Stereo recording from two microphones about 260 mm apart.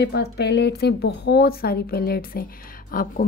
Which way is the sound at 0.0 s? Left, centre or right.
Left.